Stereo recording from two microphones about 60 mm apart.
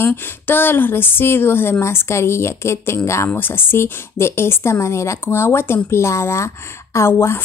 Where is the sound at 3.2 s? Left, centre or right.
Left.